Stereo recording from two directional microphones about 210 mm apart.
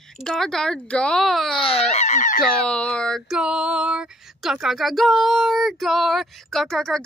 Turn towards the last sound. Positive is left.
turn(degrees=0)  # may be behind; listen again after turning